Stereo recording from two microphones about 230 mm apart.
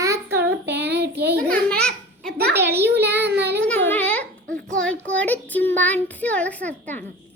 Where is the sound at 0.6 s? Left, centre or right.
Right.